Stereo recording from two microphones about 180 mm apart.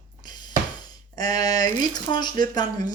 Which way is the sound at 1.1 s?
20° left (ahead or behind).